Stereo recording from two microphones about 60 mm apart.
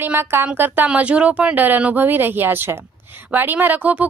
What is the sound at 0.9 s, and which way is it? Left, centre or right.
A woman's voice, centre.